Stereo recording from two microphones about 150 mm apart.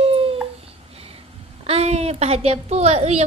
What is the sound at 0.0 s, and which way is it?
Babbling, 40° right (ahead or behind).